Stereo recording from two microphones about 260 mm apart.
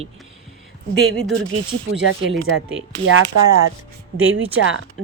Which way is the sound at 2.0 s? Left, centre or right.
Right.